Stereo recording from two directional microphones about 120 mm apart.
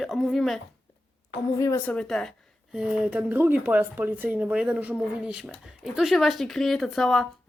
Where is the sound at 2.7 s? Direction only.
10° right (ahead or behind).